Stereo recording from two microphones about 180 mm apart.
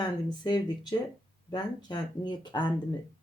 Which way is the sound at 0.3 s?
25° left (ahead or behind).